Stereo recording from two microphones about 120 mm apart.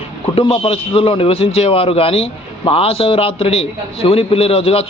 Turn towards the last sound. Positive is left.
turn(degrees=55)  # may be behind; listen again after turning